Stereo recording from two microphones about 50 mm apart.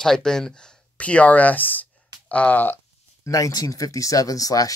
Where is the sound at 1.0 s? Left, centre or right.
Left.